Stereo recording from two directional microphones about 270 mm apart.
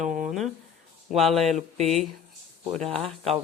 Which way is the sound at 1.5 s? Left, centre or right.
Right.